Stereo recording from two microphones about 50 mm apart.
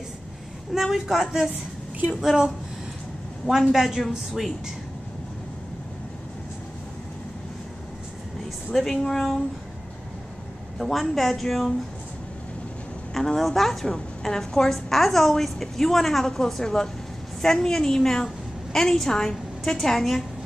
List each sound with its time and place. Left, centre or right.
0.7 s a woman's voice: centre
3.4 s a woman's voice: centre
8.9 s a woman's voice: centre
10.8 s a woman's voice: centre
13.1 s a woman's voice: centre